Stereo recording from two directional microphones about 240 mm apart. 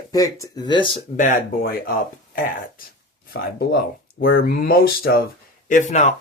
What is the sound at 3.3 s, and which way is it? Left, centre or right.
Speech, left.